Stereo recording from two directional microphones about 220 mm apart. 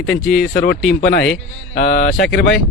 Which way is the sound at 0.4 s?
45° left (ahead or behind).